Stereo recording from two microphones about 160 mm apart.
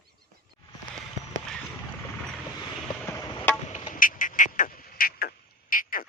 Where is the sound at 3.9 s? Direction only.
60° left (ahead or behind).